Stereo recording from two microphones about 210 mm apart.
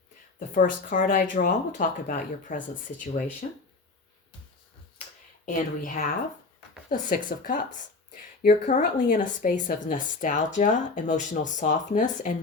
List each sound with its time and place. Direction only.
0.3 s a woman's voice: 40° left (ahead or behind)
5.5 s a woman's voice: 40° left (ahead or behind)